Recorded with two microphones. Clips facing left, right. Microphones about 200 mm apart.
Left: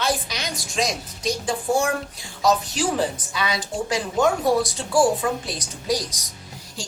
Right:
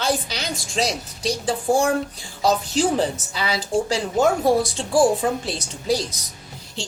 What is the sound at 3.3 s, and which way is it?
Speech, 30° right (ahead or behind).